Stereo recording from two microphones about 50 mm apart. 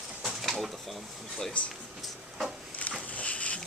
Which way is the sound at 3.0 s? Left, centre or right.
Left.